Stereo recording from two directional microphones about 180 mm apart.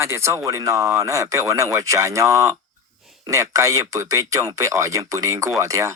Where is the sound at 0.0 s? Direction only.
15° right (ahead or behind).